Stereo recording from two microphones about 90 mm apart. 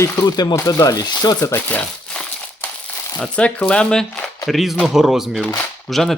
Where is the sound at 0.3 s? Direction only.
40° left (ahead or behind).